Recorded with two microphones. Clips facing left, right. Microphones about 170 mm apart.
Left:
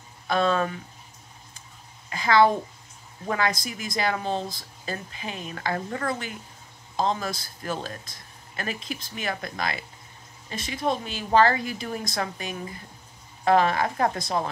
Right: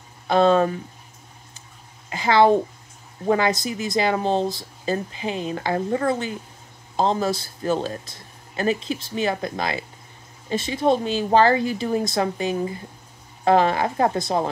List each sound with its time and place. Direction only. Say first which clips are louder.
0.3 s speech: right 7 dB; 30° right (ahead or behind)
2.0 s a woman's voice: right 3 dB; 25° right (ahead or behind)